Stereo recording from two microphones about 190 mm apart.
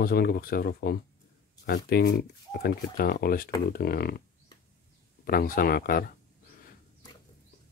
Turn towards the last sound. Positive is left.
turn(degrees=50)  # may be behind; listen again after turning